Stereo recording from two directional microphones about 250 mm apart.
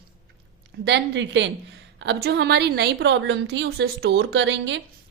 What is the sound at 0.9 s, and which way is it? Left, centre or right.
A woman's voice, right.